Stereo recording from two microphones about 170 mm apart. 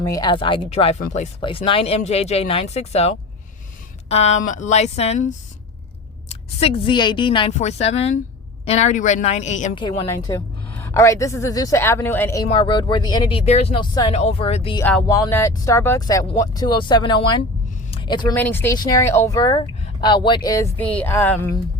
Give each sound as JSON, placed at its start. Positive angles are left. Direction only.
{"t": 0.0, "sound": "a woman's voice", "side_deg": 20}
{"t": 1.4, "sound": "a woman's voice", "side_deg": 30}
{"t": 6.2, "sound": "a woman's voice", "side_deg": 35}
{"t": 10.1, "sound": "a woman's voice", "side_deg": 15}
{"t": 12.5, "sound": "speech", "side_deg": 30}
{"t": 13.4, "sound": "a woman's voice", "side_deg": 40}
{"t": 14.1, "sound": "a woman's voice", "side_deg": 40}
{"t": 14.8, "sound": "speech", "side_deg": 15}
{"t": 17.9, "sound": "a sound", "side_deg": 25}
{"t": 18.3, "sound": "a woman's voice", "side_deg": 10}
{"t": 20.7, "sound": "a woman's voice", "side_deg": 10}